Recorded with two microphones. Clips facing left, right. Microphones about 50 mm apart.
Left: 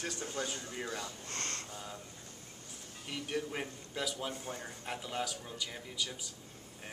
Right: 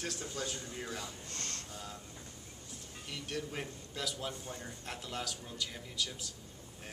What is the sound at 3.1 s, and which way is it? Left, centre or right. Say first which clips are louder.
Speech: left 3 dB; centre.